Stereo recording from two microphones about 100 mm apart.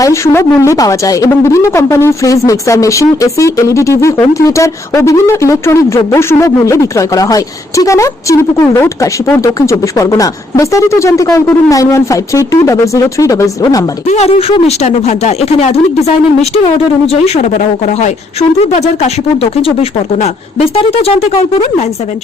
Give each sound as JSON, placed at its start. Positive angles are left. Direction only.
{"t": 0.0, "sound": "speech", "side_deg": 30}
{"t": 14.2, "sound": "speech", "side_deg": 80}